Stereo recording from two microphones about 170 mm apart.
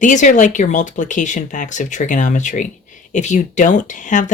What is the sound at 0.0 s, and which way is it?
Speech, 45° left (ahead or behind).